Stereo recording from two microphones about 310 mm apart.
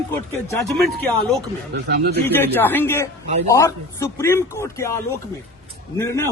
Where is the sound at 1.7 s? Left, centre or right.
Right.